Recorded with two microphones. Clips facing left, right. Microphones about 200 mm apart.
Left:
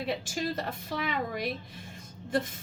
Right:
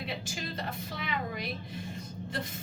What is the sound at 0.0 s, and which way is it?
A woman's voice, 50° left (ahead or behind).